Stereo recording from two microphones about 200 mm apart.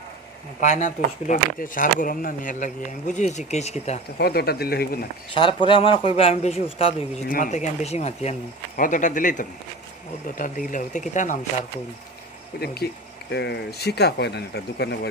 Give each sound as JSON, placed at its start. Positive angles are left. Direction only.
{"t": 0.6, "sound": "speech", "side_deg": 40}
{"t": 4.2, "sound": "speech", "side_deg": 50}
{"t": 5.3, "sound": "speech", "side_deg": 25}
{"t": 7.2, "sound": "speech", "side_deg": 40}
{"t": 12.5, "sound": "speech", "side_deg": 50}